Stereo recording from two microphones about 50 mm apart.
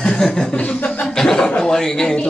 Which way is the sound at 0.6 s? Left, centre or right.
Left.